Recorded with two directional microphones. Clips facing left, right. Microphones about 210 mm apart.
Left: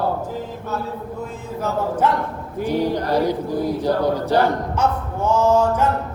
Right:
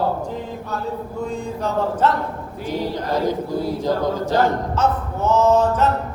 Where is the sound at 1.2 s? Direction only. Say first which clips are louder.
Right 2 dB; 5° left (ahead or behind).